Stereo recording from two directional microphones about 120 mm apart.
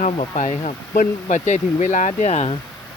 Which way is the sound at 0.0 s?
75° left (ahead or behind).